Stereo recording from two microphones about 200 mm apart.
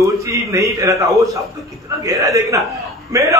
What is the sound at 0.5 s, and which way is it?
A man's voice, 15° right (ahead or behind).